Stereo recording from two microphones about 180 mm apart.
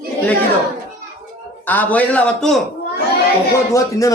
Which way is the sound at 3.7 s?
20° left (ahead or behind).